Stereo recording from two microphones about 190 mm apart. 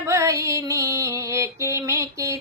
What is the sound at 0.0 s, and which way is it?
Music, 15° right (ahead or behind).